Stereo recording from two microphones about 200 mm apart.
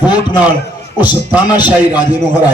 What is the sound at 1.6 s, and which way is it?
Speech, 20° left (ahead or behind).